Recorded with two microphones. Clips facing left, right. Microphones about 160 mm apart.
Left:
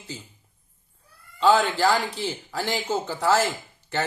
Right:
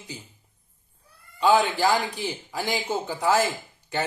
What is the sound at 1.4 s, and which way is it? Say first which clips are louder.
A man's voice: left 1 dB; 15° right (ahead or behind).